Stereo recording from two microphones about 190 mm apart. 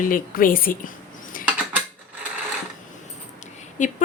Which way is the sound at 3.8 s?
40° left (ahead or behind).